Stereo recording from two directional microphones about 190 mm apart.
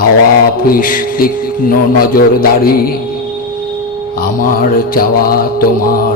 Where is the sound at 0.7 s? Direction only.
45° left (ahead or behind).